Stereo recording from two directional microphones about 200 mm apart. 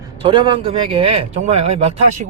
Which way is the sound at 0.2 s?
25° right (ahead or behind).